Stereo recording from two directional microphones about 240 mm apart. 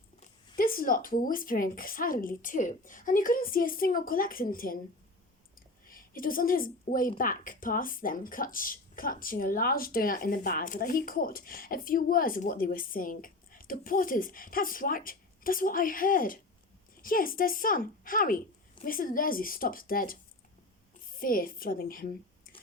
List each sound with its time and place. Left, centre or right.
0.2 s a woman's voice: left
5.9 s a woman's voice: left
21.2 s a woman's voice: left